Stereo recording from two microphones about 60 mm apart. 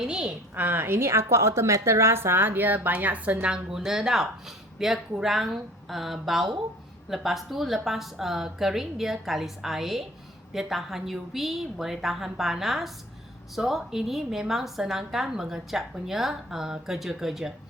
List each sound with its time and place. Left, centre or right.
0.0 s a woman's voice: centre
0.5 s a woman's voice: right
0.8 s a woman's voice: right; by 17.5 s centre